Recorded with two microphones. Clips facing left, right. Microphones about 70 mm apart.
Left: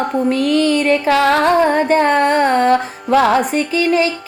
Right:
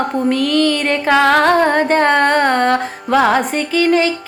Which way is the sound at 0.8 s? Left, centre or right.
Right.